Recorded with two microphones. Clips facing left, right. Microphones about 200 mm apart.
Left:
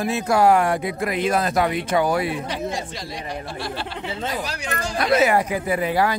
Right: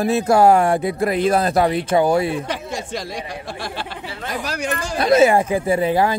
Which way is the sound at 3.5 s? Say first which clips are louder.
Right 1 dB; 45° right (ahead or behind).